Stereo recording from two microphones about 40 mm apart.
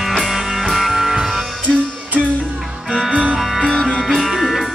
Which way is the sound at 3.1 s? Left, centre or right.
Right.